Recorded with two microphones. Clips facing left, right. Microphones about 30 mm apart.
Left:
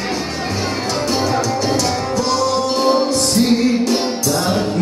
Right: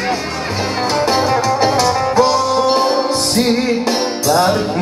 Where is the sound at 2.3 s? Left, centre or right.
Centre.